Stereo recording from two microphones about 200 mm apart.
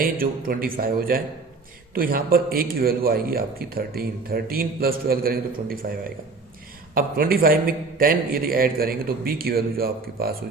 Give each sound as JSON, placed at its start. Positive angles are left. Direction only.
{"t": 0.0, "sound": "a man's voice", "side_deg": -45}